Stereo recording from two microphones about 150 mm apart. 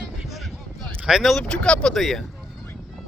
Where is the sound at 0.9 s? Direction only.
5° right (ahead or behind).